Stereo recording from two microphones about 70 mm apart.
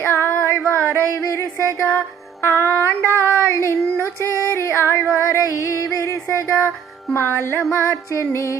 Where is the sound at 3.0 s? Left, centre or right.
Right.